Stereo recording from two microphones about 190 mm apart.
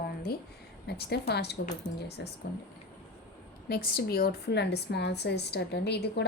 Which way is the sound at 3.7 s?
55° left (ahead or behind).